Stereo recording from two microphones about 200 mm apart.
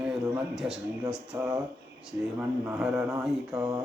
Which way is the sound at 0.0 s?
Centre (ahead or behind).